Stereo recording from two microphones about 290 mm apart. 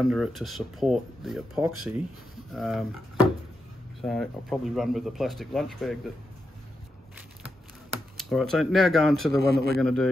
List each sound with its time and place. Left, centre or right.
0.0 s speech: centre
8.2 s speech: centre
9.4 s a man's voice: right
9.8 s speech: centre